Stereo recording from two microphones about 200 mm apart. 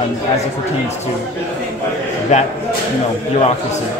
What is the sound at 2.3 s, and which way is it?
Speech, 35° left (ahead or behind).